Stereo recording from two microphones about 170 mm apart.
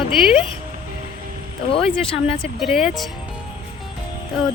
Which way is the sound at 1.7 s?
35° left (ahead or behind).